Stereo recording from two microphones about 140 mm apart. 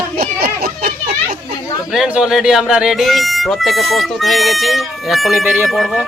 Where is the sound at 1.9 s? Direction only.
5° right (ahead or behind).